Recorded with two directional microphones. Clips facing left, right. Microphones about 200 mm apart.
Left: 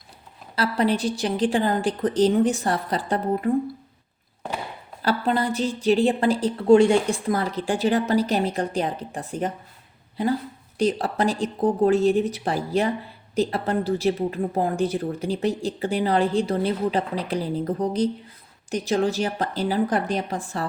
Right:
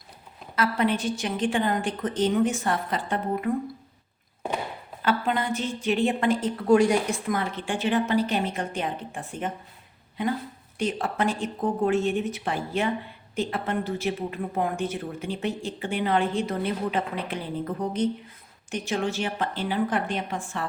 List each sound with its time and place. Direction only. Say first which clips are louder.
0.5 s a woman's voice: left 2 dB; 35° left (ahead or behind)
5.0 s a woman's voice: left 3 dB; 35° left (ahead or behind)
10.8 s a woman's voice: left 4 dB; 35° left (ahead or behind)